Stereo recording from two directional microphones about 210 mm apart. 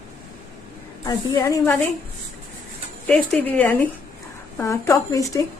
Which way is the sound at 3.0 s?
5° left (ahead or behind).